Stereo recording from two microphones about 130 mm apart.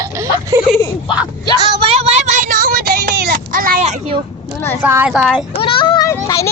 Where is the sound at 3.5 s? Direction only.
90° right.